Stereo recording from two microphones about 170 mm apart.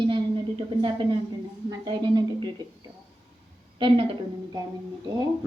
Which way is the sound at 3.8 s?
35° right (ahead or behind).